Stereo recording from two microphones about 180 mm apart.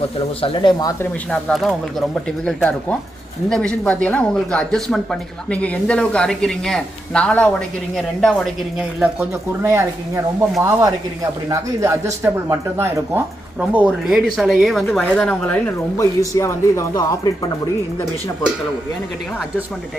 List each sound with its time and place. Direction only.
0.4 s speech: 25° left (ahead or behind)
1.3 s speech: centre (ahead or behind)
9.6 s speech: 15° right (ahead or behind); by 17.5 s 20° left (ahead or behind)